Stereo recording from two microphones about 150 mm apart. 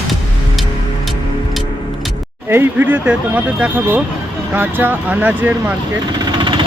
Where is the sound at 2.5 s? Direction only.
15° right (ahead or behind).